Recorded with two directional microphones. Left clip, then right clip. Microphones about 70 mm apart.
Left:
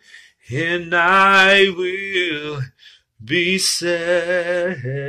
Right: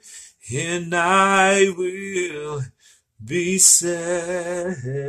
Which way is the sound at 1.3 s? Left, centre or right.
Centre.